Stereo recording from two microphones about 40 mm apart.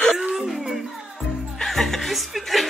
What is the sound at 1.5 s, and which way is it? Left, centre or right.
Music, centre.